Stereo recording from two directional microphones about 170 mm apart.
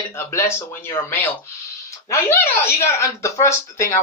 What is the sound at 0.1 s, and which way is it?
Speech, 15° left (ahead or behind).